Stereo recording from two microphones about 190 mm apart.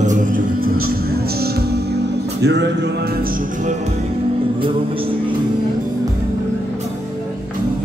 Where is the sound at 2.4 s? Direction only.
65° right (ahead or behind).